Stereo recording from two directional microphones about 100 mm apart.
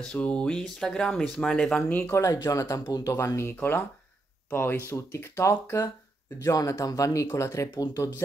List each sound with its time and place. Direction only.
0.0 s speech: 10° left (ahead or behind)
2.0 s speech: 30° left (ahead or behind)